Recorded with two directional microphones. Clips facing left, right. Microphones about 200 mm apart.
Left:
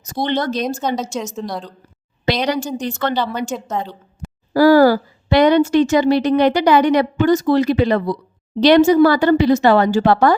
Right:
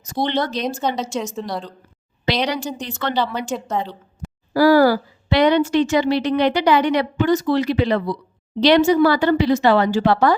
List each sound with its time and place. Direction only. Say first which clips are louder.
0.1 s a woman's voice: left 2 dB; 45° left (ahead or behind)
1.4 s a woman's voice: left 1 dB; centre (ahead or behind)
2.3 s a woman's voice: left 3 dB; 45° left (ahead or behind)
3.5 s a woman's voice: even; centre (ahead or behind)
4.5 s a woman's voice: left 3 dB; 45° left (ahead or behind)